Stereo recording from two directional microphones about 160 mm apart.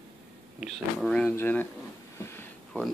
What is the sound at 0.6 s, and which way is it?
Speech, 5° left (ahead or behind).